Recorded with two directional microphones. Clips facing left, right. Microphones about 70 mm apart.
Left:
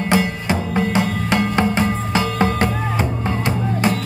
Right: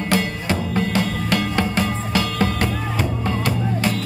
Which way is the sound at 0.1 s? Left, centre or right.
Centre.